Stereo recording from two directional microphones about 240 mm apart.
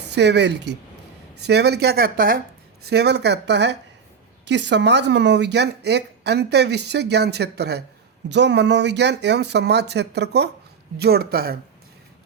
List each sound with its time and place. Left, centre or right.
0.1 s speech: right